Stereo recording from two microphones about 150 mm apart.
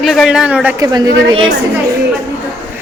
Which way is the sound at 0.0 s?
Centre (ahead or behind).